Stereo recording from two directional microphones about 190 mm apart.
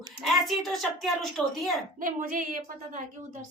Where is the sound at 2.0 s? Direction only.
45° right (ahead or behind).